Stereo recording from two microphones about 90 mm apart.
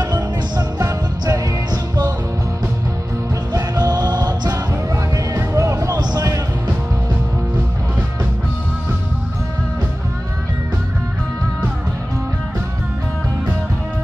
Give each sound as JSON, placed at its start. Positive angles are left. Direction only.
{"t": 0.0, "sound": "music", "side_deg": -50}
{"t": 3.5, "sound": "music", "side_deg": -45}
{"t": 5.1, "sound": "music", "side_deg": -35}